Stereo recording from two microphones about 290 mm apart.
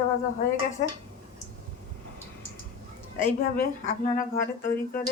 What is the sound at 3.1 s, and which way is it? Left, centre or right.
Speech, left.